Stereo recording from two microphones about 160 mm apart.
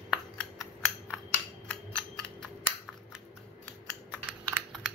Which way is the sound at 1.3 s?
10° left (ahead or behind).